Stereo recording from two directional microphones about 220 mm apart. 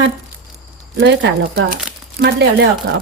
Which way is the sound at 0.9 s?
55° right (ahead or behind).